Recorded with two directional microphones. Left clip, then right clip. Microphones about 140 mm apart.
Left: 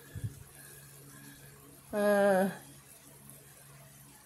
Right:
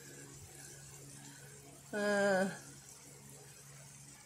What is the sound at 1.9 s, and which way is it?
Female singing, 25° left (ahead or behind).